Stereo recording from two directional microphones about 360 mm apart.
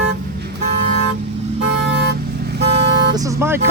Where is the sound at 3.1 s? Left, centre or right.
Centre.